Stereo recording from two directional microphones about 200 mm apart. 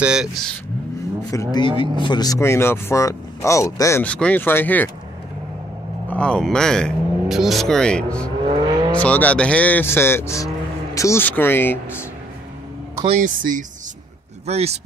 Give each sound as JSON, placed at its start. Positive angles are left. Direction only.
{"t": 0.0, "sound": "speech", "side_deg": -5}
{"t": 1.3, "sound": "speech", "side_deg": 20}
{"t": 6.0, "sound": "speech", "side_deg": 5}
{"t": 8.5, "sound": "vehicle", "side_deg": -25}
{"t": 8.9, "sound": "speech", "side_deg": 5}
{"t": 13.0, "sound": "speech", "side_deg": -35}